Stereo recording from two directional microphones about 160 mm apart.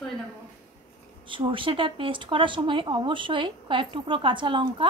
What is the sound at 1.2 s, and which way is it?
Speech, 30° right (ahead or behind).